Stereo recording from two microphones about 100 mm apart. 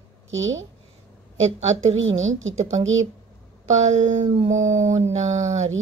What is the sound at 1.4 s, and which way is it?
A woman's voice, 90° right.